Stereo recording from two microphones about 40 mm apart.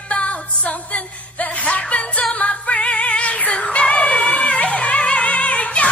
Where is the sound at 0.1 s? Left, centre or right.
Left.